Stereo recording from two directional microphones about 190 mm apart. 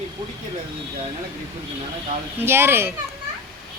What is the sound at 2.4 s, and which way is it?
Speech, 10° right (ahead or behind).